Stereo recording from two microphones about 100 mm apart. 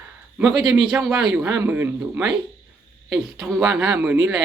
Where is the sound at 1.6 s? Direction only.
20° right (ahead or behind).